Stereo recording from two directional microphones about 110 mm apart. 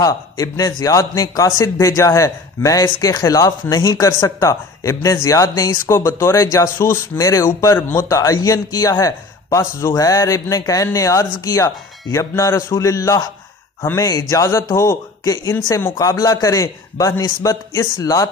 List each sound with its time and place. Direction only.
0.0 s a man's voice: 35° left (ahead or behind)
8.1 s a man's voice: 30° left (ahead or behind)